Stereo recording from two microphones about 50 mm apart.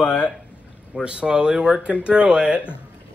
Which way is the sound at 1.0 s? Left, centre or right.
Centre.